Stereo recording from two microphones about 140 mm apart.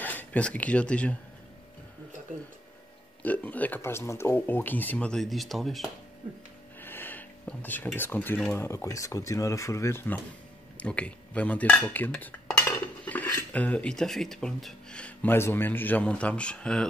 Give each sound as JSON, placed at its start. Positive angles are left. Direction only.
{"t": 0.0, "sound": "speech", "side_deg": 10}
{"t": 3.2, "sound": "speech", "side_deg": 10}
{"t": 6.8, "sound": "a sound", "side_deg": 15}
{"t": 8.5, "sound": "speech", "side_deg": 20}
{"t": 10.8, "sound": "dishes", "side_deg": 10}
{"t": 12.6, "sound": "speech", "side_deg": 10}